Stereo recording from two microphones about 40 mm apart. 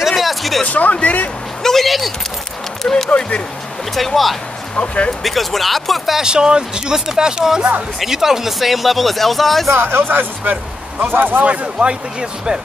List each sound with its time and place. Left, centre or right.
0.1 s a sound: centre
0.7 s speech: left
1.6 s a sound: centre
2.8 s speech: centre
3.2 s speech: left
3.9 s speech: centre
4.7 s speech: left
5.2 s speech: centre
6.2 s speech: right; by 9.7 s centre
9.8 s speech: right
11.4 s speech: right